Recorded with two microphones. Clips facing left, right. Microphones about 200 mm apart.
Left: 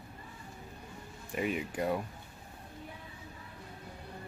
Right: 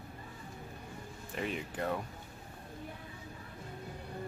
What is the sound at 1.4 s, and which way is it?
Speech, 10° left (ahead or behind).